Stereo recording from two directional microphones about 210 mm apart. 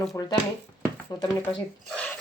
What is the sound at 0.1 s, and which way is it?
Speech, 15° left (ahead or behind).